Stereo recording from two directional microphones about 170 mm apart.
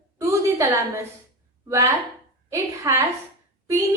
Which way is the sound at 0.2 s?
15° right (ahead or behind).